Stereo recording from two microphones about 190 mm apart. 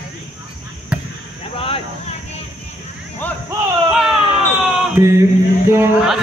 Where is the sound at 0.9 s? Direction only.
5° right (ahead or behind).